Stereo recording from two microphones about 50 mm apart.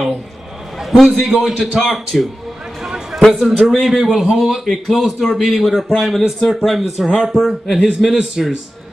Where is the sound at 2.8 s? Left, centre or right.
Centre.